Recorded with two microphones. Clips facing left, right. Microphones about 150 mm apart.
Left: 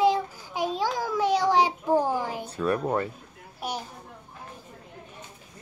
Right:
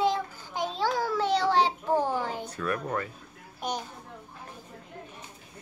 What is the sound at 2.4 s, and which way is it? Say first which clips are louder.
Speech: left 5 dB; 30° left (ahead or behind).